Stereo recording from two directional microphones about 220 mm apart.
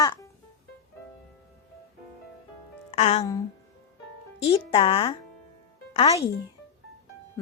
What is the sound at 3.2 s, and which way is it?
A woman's voice, 15° left (ahead or behind).